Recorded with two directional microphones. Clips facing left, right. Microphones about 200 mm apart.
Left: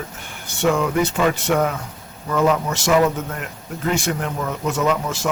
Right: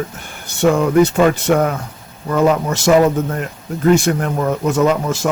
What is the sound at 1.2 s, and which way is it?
Speech, 45° right (ahead or behind).